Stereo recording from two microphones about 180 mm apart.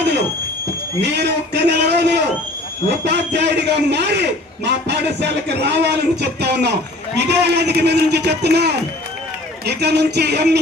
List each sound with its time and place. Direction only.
1.0 s a man's voice: 70° right (ahead or behind)